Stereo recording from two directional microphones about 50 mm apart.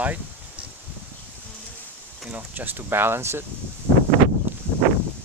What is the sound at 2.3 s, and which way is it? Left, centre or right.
Speech, right.